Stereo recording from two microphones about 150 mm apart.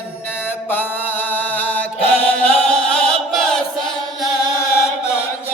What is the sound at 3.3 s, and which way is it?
Chant, 5° left (ahead or behind).